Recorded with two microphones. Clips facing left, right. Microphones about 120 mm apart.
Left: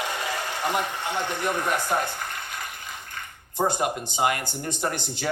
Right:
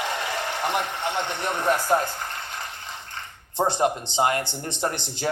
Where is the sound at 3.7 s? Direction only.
25° right (ahead or behind).